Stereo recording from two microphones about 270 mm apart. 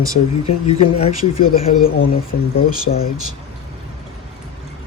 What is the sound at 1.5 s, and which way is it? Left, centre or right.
Speech, left.